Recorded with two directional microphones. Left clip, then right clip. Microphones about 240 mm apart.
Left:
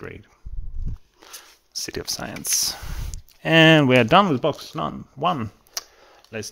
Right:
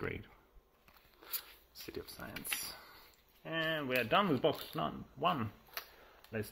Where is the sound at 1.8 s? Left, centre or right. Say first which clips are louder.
Left 16 dB; left.